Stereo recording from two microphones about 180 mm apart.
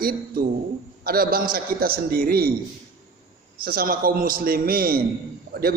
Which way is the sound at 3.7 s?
55° right (ahead or behind).